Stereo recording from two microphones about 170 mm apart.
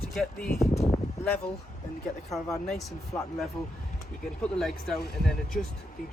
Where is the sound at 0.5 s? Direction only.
15° left (ahead or behind).